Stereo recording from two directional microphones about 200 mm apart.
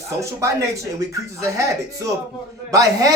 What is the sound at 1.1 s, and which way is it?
Speech, 15° right (ahead or behind).